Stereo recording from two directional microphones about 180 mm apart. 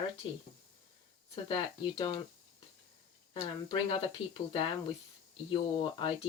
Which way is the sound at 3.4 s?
25° left (ahead or behind).